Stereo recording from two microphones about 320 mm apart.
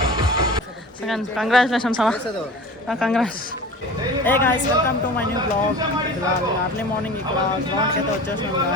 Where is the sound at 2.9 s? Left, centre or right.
Centre.